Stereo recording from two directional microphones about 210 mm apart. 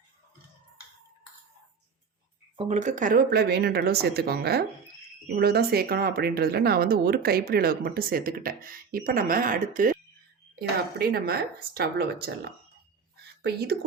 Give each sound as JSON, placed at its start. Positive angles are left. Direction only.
{"t": 2.6, "sound": "speech", "side_deg": -35}